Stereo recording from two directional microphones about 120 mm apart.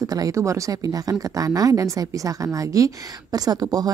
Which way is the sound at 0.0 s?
30° right (ahead or behind).